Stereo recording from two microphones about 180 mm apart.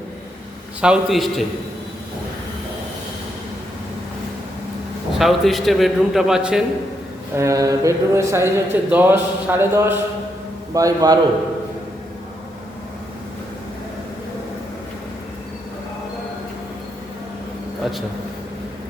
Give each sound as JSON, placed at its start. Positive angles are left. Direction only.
{"t": 0.8, "sound": "a man's voice", "side_deg": -5}
{"t": 5.1, "sound": "a man's voice", "side_deg": 0}
{"t": 7.3, "sound": "a man's voice", "side_deg": -15}